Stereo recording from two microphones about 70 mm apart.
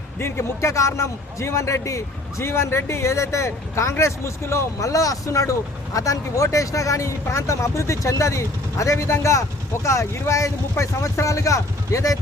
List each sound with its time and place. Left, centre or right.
0.2 s a man's voice: left